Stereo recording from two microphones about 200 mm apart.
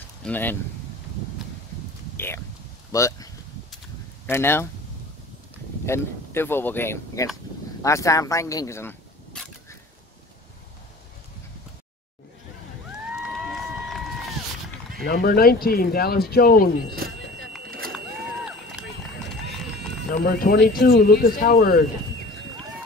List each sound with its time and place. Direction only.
0.2 s speech: 10° left (ahead or behind)
2.1 s speech: 10° left (ahead or behind)
4.3 s speech: 10° left (ahead or behind)
5.9 s speech: 10° left (ahead or behind)
13.3 s run: centre (ahead or behind)
15.0 s speech: 50° left (ahead or behind)
17.6 s vehicle: 45° right (ahead or behind)
17.9 s run: 5° right (ahead or behind)
20.1 s speech: 45° left (ahead or behind)